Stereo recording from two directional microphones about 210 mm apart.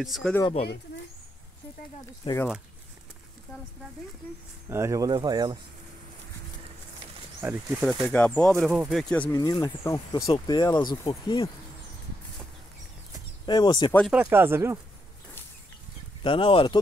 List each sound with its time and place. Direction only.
0.0 s speech: centre (ahead or behind)
0.4 s speech: 25° left (ahead or behind)
2.3 s speech: 25° left (ahead or behind)
4.6 s speech: 15° right (ahead or behind)
7.4 s speech: 10° right (ahead or behind)
7.8 s speech: 5° left (ahead or behind)
9.3 s speech: 20° left (ahead or behind)
13.5 s speech: 20° left (ahead or behind)
13.9 s speech: centre (ahead or behind)
16.2 s speech: 25° left (ahead or behind)